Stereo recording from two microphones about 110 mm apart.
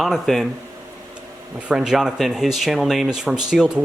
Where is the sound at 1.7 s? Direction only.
5° right (ahead or behind).